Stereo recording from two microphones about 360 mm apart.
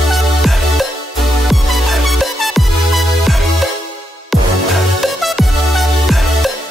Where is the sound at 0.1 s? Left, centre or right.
Centre.